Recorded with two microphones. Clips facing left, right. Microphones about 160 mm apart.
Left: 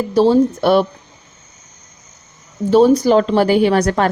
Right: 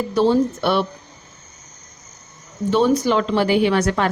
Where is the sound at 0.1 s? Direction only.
35° left (ahead or behind).